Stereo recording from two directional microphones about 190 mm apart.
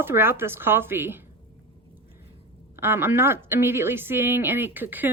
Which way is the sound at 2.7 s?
10° right (ahead or behind).